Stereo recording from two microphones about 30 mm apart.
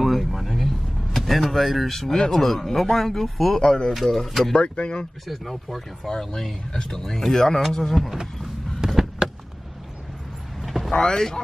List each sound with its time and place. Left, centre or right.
0.0 s vehicle: centre
1.9 s speech: centre
4.6 s speech: left
5.3 s speech: centre
6.0 s speech: centre
8.4 s a sound: centre
10.6 s vehicle: centre
10.9 s speech: left